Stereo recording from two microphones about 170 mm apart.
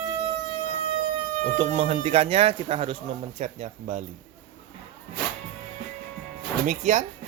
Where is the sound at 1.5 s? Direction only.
25° right (ahead or behind).